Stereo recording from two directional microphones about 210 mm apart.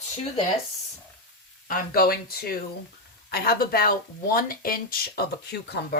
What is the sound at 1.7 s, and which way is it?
Speech, 45° left (ahead or behind).